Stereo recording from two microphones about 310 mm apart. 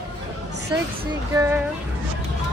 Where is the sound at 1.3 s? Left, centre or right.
Centre.